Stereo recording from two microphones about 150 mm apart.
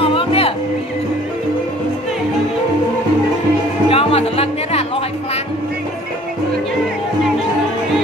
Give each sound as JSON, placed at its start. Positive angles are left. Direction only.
{"t": 0.0, "sound": "music", "side_deg": 35}
{"t": 3.9, "sound": "music", "side_deg": 40}